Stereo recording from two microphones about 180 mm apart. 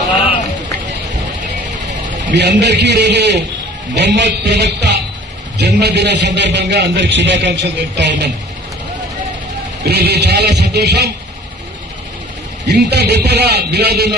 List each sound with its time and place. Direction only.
2.3 s a man's voice: 70° right (ahead or behind)
9.8 s a man's voice: 65° right (ahead or behind)
12.6 s a man's voice: 65° right (ahead or behind)